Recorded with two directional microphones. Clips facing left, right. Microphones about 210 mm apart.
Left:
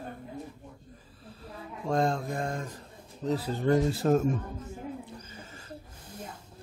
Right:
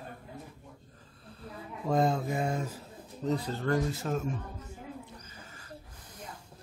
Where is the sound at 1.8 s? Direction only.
5° right (ahead or behind).